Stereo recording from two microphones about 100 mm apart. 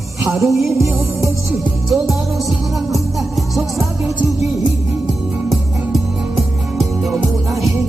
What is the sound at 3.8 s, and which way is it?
Music, 30° right (ahead or behind).